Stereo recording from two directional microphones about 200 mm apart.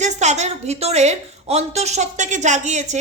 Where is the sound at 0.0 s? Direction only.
35° right (ahead or behind).